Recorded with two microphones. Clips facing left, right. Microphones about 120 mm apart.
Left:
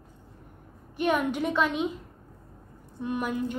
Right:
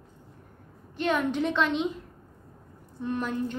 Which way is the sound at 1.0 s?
10° left (ahead or behind).